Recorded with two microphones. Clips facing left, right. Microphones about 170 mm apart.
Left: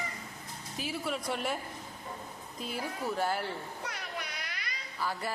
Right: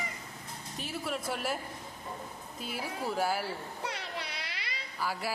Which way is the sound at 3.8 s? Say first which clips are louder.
Right 5 dB; 25° right (ahead or behind).